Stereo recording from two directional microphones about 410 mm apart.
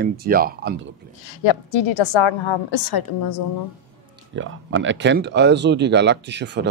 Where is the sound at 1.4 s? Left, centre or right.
Left.